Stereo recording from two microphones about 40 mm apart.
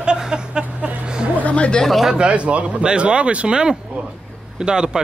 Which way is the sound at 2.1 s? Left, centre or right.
Right.